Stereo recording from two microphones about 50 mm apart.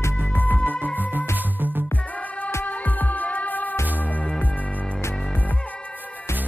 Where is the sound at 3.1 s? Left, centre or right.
Left.